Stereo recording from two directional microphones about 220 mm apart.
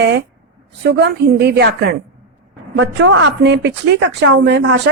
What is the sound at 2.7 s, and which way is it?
A woman's voice, 60° right (ahead or behind).